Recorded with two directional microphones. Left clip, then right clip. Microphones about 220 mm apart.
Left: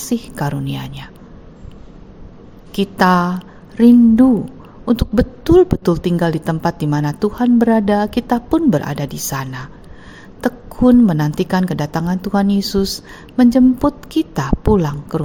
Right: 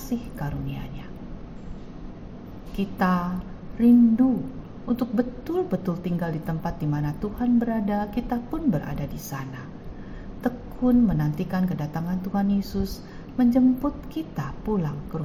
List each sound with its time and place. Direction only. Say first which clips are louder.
0.1 s a woman's voice: left 11 dB; 50° left (ahead or behind)
2.7 s a woman's voice: left 12 dB; 50° left (ahead or behind)